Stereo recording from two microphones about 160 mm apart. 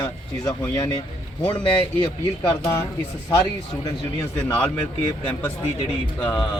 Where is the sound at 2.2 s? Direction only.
20° left (ahead or behind).